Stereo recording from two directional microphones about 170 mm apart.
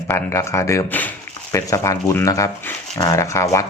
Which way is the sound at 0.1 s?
15° left (ahead or behind).